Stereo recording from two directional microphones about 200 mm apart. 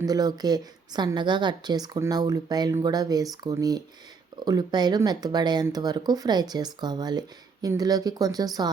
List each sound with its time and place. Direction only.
0.0 s speech: 20° right (ahead or behind)